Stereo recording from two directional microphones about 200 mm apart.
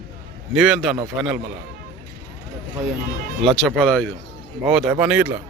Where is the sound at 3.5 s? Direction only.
5° left (ahead or behind).